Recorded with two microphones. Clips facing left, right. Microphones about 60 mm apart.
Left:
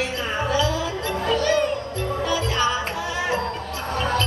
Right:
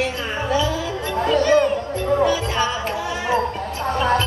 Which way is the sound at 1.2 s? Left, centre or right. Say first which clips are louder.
Right 5 dB; right.